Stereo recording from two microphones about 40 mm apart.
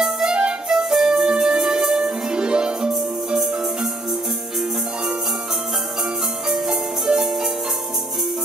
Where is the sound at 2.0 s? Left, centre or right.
Right.